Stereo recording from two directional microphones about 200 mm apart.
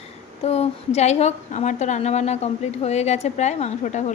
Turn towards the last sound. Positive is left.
turn(degrees=35)  # may be behind; listen again after turning